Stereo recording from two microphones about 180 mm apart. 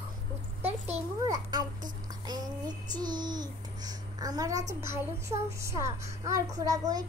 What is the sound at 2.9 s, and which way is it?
A child's voice, 25° right (ahead or behind).